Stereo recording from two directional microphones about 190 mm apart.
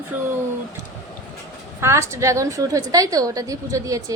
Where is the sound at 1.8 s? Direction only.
15° right (ahead or behind).